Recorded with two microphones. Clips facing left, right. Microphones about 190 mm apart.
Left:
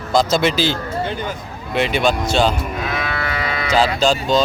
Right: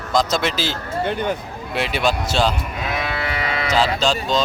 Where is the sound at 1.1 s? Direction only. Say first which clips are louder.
Right 3 dB; 60° right (ahead or behind).